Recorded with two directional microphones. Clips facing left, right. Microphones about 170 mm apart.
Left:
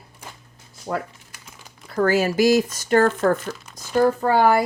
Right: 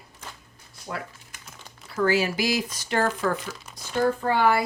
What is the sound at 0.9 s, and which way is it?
Speech, 40° left (ahead or behind).